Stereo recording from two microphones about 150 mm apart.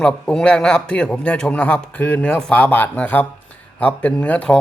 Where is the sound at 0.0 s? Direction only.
5° left (ahead or behind).